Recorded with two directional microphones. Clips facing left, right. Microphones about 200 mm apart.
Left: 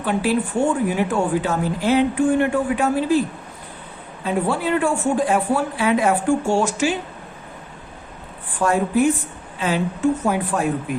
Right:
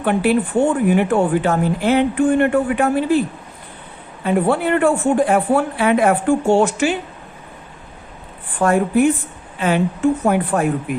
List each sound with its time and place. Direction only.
0.0 s speech: 60° right (ahead or behind)
4.2 s speech: 60° right (ahead or behind)
8.6 s a woman's voice: 55° right (ahead or behind)